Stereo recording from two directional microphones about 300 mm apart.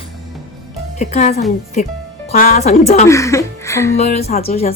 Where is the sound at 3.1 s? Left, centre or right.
Centre.